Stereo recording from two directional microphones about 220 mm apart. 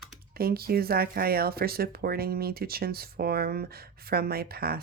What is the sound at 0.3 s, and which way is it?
Speech, 45° right (ahead or behind).